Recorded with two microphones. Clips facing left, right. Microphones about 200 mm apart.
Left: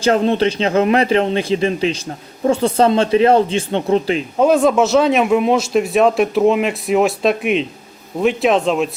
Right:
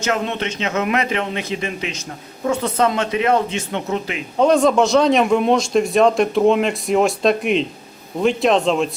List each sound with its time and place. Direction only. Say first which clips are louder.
0.0 s speech: left 7 dB; 35° left (ahead or behind)
4.4 s speech: left 1 dB; 5° left (ahead or behind)